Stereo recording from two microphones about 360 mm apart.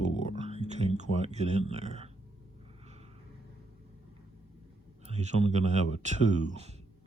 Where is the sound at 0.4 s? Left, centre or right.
Centre.